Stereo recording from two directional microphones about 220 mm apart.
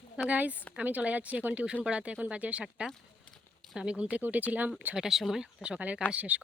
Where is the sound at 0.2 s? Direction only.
5° right (ahead or behind).